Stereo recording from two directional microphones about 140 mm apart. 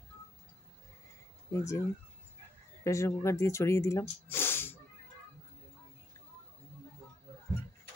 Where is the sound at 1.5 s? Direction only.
20° left (ahead or behind).